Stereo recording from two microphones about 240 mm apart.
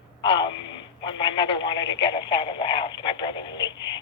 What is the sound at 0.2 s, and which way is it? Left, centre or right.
Speech, centre.